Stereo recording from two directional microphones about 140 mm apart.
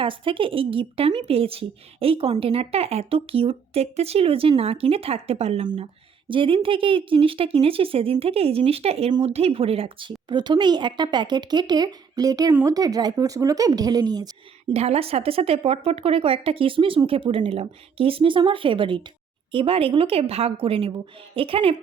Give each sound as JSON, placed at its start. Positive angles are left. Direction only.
{"t": 0.0, "sound": "a woman's voice", "side_deg": -40}
{"t": 5.6, "sound": "a woman's voice", "side_deg": -35}
{"t": 14.7, "sound": "a woman's voice", "side_deg": -45}